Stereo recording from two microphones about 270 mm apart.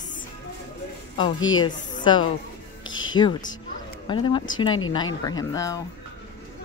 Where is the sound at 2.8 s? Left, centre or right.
Left.